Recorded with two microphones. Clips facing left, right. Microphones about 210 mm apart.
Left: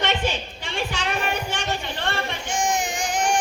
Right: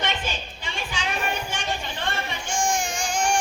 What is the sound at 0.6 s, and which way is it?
Music, 65° left (ahead or behind).